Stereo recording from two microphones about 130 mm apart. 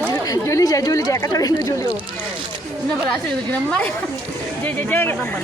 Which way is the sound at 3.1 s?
10° left (ahead or behind).